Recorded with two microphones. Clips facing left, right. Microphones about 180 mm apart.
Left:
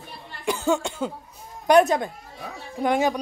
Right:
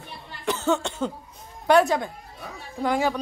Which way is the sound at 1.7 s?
20° left (ahead or behind).